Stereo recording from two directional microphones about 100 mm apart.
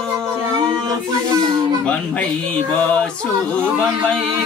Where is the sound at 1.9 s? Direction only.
10° left (ahead or behind).